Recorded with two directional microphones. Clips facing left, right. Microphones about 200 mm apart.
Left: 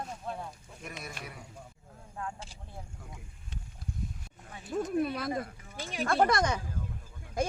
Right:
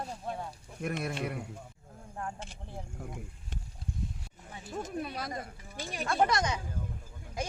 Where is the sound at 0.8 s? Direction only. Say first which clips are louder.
Right 10 dB; 55° right (ahead or behind).